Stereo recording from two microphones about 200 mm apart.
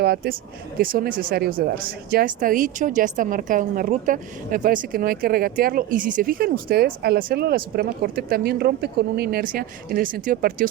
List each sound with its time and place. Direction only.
0.0 s speech: 50° right (ahead or behind)